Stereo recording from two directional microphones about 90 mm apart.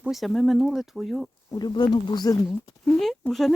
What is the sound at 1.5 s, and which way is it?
Speech, 55° left (ahead or behind).